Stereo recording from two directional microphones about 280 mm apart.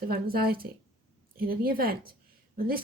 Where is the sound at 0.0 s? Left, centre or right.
Right.